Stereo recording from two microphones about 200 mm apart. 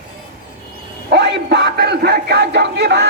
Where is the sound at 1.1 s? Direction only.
60° right (ahead or behind).